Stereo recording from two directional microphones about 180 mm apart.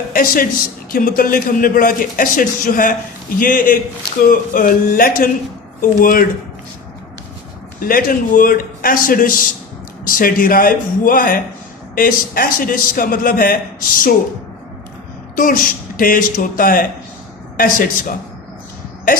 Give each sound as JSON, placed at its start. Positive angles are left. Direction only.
{"t": 0.1, "sound": "a man's voice", "side_deg": 55}
{"t": 7.8, "sound": "a man's voice", "side_deg": 55}
{"t": 15.4, "sound": "a man's voice", "side_deg": 50}